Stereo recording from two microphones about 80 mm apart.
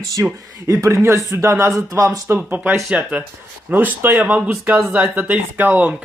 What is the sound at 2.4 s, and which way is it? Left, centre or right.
Speech, right.